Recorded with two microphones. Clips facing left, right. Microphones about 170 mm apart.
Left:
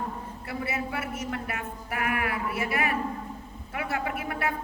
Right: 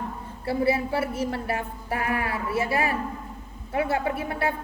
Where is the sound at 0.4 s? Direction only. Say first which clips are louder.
Right 9 dB; 30° right (ahead or behind).